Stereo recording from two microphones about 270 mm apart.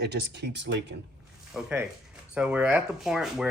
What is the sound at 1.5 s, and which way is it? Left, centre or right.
Speech, centre.